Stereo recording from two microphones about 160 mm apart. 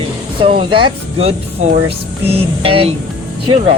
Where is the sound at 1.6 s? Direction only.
45° right (ahead or behind).